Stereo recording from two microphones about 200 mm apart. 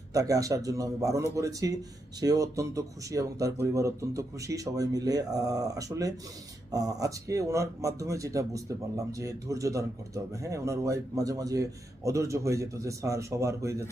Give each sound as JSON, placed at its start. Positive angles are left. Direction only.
{"t": 0.1, "sound": "speech", "side_deg": -15}